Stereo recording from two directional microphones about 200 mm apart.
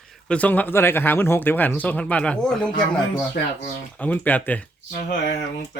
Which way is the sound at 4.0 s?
10° left (ahead or behind).